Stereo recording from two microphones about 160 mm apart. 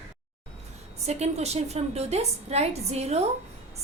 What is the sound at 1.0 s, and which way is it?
A woman's voice, 40° right (ahead or behind).